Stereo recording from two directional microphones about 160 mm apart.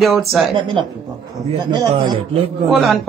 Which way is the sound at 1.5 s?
30° right (ahead or behind).